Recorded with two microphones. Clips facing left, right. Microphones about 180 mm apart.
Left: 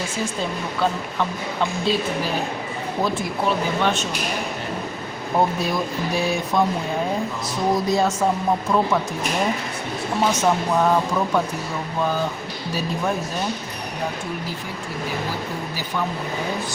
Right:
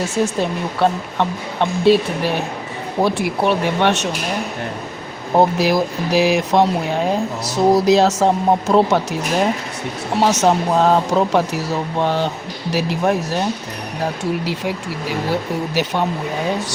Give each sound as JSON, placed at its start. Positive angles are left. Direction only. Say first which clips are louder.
{"t": 0.3, "sound": "speech", "louder": "right 5 dB", "side_deg": -70}
{"t": 5.4, "sound": "speech", "louder": "right 7 dB", "side_deg": -85}
{"t": 10.2, "sound": "speech", "louder": "right 5 dB", "side_deg": -75}
{"t": 14.4, "sound": "speech", "louder": "right 8 dB", "side_deg": -80}